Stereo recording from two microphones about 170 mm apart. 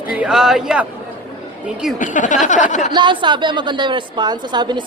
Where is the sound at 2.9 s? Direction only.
25° right (ahead or behind).